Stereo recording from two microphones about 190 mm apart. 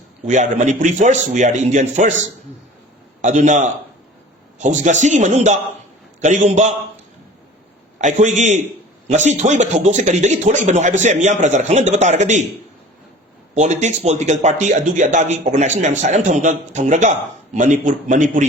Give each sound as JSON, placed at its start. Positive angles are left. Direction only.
{"t": 0.3, "sound": "speech", "side_deg": -40}
{"t": 3.2, "sound": "speech", "side_deg": -40}
{"t": 7.9, "sound": "speech", "side_deg": -40}
{"t": 13.5, "sound": "speech", "side_deg": -40}